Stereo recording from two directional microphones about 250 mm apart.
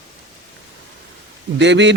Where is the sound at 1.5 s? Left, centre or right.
Right.